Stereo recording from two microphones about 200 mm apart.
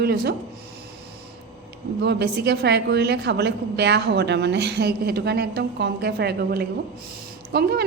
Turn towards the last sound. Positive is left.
turn(degrees=-55)  # may be behind; listen again after turning